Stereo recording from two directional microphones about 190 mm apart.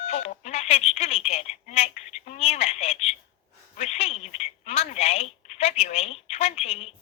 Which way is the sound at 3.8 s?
35° left (ahead or behind).